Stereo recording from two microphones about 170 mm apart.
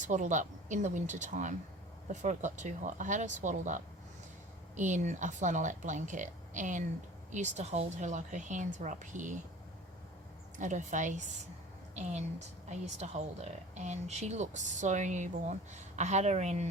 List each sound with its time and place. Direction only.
0.0 s a woman's voice: 45° right (ahead or behind)
10.6 s a woman's voice: 45° right (ahead or behind)